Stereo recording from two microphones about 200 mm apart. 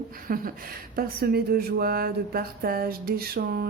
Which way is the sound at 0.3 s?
45° right (ahead or behind).